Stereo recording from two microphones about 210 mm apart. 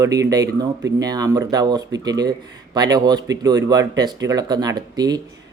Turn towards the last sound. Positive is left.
turn(degrees=-20)  # may be behind; listen again after turning